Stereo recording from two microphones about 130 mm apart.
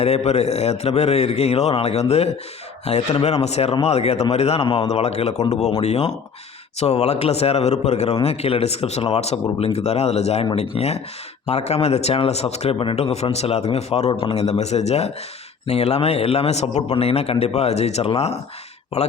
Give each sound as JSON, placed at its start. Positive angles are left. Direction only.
{"t": 0.0, "sound": "a man's voice", "side_deg": 55}
{"t": 4.9, "sound": "a man's voice", "side_deg": 55}
{"t": 14.1, "sound": "a man's voice", "side_deg": 45}